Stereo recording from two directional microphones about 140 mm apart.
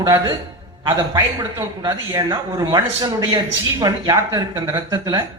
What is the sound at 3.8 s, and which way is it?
Speech, 25° right (ahead or behind).